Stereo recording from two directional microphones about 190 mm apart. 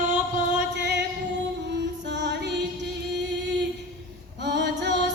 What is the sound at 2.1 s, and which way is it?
Music, 65° right (ahead or behind).